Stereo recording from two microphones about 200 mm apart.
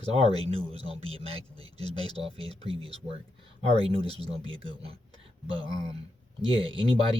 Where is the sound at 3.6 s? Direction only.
30° right (ahead or behind).